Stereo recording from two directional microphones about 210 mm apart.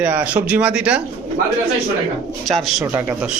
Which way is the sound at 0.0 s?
5° right (ahead or behind).